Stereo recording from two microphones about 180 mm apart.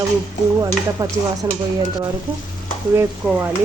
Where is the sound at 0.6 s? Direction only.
20° right (ahead or behind).